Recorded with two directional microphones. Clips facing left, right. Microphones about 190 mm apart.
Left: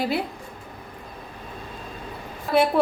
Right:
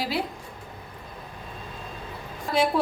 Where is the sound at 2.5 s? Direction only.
55° left (ahead or behind).